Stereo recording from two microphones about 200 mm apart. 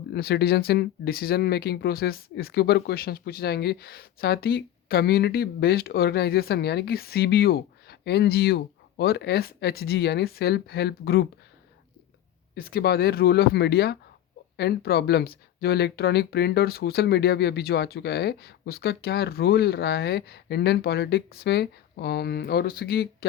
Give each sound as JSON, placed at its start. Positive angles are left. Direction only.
{"t": 0.1, "sound": "speech", "side_deg": 55}
{"t": 12.5, "sound": "speech", "side_deg": 50}